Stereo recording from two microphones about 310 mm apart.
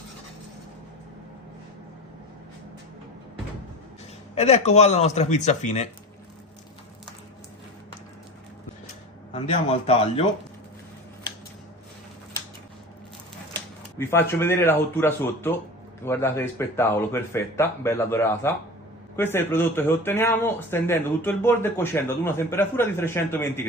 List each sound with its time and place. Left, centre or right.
4.4 s speech: centre
9.3 s speech: centre
14.0 s a man's voice: centre